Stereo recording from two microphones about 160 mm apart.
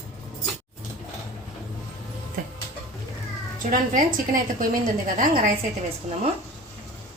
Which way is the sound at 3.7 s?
55° right (ahead or behind).